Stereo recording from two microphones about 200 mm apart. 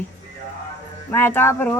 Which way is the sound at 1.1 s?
10° left (ahead or behind).